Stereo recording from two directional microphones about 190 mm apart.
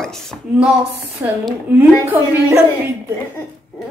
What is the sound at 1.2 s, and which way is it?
A woman's voice, 10° right (ahead or behind).